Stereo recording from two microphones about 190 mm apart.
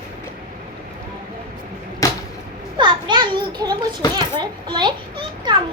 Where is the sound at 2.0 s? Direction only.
15° left (ahead or behind).